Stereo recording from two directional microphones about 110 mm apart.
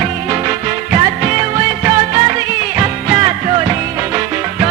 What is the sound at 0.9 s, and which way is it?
Music, 55° right (ahead or behind).